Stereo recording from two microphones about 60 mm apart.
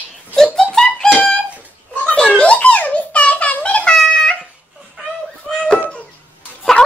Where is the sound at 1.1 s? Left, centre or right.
Centre.